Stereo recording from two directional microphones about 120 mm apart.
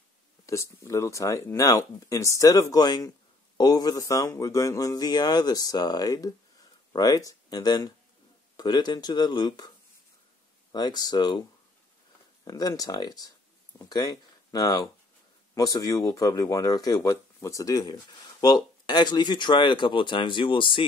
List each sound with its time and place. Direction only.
0.5 s speech: 25° left (ahead or behind)
10.7 s speech: 35° left (ahead or behind)
12.4 s speech: 30° left (ahead or behind)